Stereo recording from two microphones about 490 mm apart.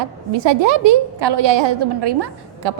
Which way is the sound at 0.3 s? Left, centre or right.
Right.